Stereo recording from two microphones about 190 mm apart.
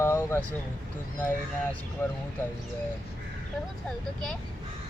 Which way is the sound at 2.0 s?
10° left (ahead or behind).